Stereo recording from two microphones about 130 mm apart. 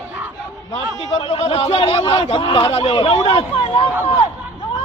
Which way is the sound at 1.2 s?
45° left (ahead or behind).